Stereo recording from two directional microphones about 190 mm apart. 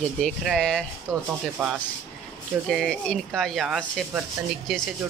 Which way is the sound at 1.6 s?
Centre (ahead or behind).